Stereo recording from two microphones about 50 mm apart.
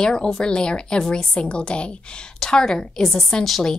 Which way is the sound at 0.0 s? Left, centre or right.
Centre.